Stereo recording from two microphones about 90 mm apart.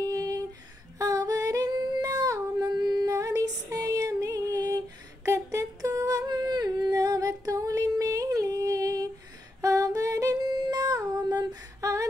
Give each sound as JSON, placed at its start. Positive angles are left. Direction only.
{"t": 0.0, "sound": "a sound", "side_deg": -40}
{"t": 0.9, "sound": "female singing", "side_deg": -40}
{"t": 1.8, "sound": "humming", "side_deg": -50}
{"t": 10.4, "sound": "humming", "side_deg": -50}